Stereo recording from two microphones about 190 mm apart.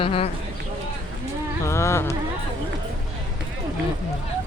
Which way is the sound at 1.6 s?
15° left (ahead or behind).